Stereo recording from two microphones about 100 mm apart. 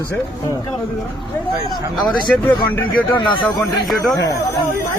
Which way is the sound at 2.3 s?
15° left (ahead or behind).